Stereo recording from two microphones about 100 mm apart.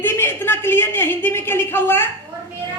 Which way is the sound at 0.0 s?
25° left (ahead or behind).